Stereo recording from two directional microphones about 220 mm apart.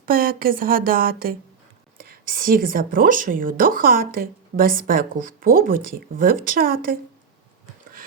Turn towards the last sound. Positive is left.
turn(degrees=-40)  # may be behind; listen again after turning